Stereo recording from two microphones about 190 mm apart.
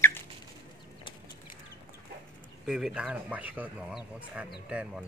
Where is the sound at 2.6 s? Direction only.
5° right (ahead or behind).